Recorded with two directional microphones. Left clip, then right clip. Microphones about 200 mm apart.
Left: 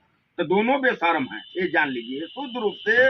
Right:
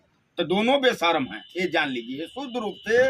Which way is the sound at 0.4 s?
35° right (ahead or behind).